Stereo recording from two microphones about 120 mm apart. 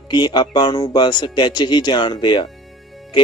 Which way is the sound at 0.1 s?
40° left (ahead or behind).